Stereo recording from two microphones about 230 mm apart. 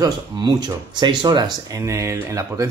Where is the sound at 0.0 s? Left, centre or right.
Centre.